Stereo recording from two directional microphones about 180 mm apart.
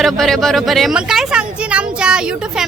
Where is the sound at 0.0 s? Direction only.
Centre (ahead or behind).